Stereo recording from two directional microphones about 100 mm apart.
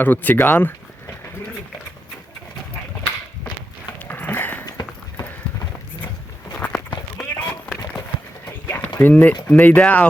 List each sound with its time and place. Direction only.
0.0 s speech: 15° left (ahead or behind)
4.1 s dog: 20° left (ahead or behind)
4.6 s clip-clop: 40° left (ahead or behind)
6.5 s walk: 10° left (ahead or behind)
7.2 s run: 15° left (ahead or behind)
8.6 s clip-clop: 25° left (ahead or behind)
9.0 s speech: 20° left (ahead or behind)